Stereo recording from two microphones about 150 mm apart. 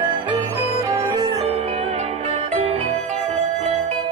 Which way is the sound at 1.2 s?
40° right (ahead or behind).